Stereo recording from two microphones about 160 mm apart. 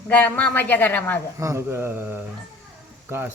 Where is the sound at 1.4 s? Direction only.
20° right (ahead or behind).